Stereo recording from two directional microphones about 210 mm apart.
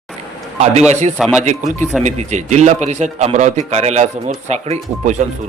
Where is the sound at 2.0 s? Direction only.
35° right (ahead or behind).